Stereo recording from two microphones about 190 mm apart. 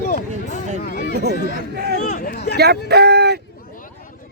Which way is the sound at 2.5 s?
60° right (ahead or behind).